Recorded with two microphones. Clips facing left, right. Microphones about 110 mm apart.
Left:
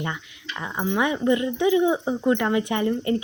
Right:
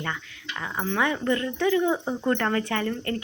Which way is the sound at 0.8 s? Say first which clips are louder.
Left 3 dB; 15° left (ahead or behind).